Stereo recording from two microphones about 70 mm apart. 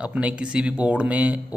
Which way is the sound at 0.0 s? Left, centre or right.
Centre.